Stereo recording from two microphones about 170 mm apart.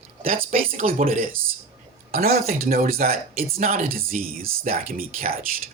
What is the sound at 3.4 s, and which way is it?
Speech, 40° right (ahead or behind).